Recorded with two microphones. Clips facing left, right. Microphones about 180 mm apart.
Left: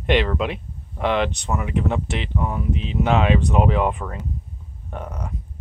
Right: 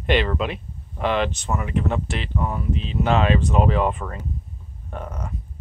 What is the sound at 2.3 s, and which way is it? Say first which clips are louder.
Speech: even; 5° left (ahead or behind).